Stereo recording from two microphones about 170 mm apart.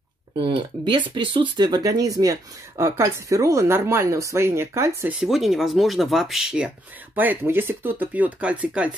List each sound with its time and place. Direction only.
0.4 s speech: 30° right (ahead or behind)
5.2 s speech: centre (ahead or behind)